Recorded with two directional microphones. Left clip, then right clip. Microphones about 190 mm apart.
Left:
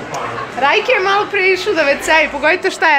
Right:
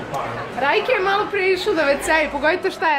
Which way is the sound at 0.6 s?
5° left (ahead or behind).